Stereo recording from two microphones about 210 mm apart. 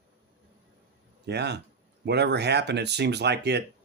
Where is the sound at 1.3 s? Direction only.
55° right (ahead or behind).